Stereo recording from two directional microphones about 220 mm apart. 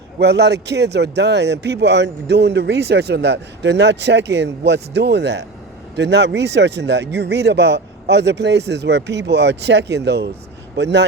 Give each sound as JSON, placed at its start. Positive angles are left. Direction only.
{"t": 0.2, "sound": "speech", "side_deg": -50}